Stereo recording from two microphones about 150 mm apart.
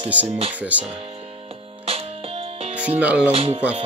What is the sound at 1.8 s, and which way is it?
Music, 40° right (ahead or behind).